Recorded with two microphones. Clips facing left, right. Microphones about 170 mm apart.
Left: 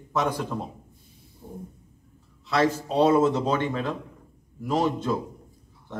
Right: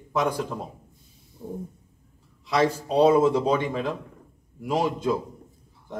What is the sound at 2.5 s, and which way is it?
A man's voice, 15° right (ahead or behind).